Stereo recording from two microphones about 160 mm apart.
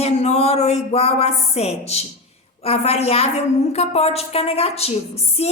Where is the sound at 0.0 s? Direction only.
40° left (ahead or behind).